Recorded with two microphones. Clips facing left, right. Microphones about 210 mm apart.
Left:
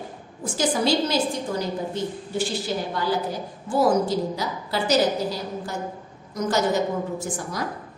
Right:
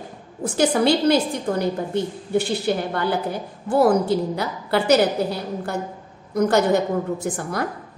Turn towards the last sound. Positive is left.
turn(degrees=-60)  # may be behind; listen again after turning